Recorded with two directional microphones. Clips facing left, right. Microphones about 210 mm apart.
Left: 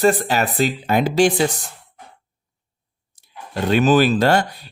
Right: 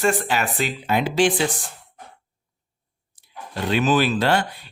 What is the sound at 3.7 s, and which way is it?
Speech, 40° left (ahead or behind).